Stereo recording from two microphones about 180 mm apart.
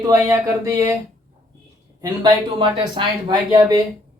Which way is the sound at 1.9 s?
20° right (ahead or behind).